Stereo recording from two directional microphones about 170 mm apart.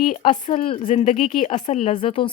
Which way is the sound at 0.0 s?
45° left (ahead or behind).